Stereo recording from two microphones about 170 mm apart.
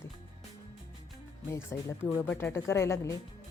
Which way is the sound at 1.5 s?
15° left (ahead or behind).